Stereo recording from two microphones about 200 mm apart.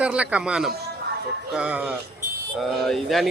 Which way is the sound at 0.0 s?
5° right (ahead or behind).